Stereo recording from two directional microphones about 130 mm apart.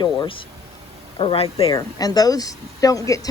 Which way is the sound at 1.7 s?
30° left (ahead or behind).